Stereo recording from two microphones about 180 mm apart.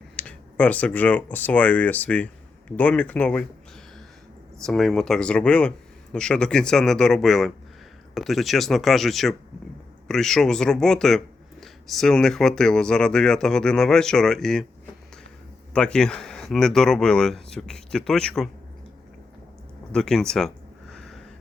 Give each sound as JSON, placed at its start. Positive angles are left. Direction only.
{"t": 0.2, "sound": "speech", "side_deg": 5}
{"t": 4.6, "sound": "speech", "side_deg": 5}
{"t": 15.7, "sound": "speech", "side_deg": 5}
{"t": 19.9, "sound": "speech", "side_deg": 5}
{"t": 20.9, "sound": "a sound", "side_deg": 5}